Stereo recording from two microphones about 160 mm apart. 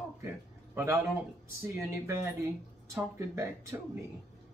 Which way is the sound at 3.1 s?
20° right (ahead or behind).